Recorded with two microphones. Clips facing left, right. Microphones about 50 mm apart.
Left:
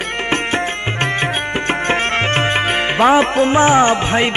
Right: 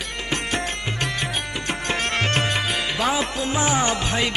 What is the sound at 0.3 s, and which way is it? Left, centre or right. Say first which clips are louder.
Music: left 6 dB; left.